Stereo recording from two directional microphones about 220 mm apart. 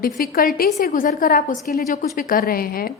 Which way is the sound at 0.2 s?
40° left (ahead or behind).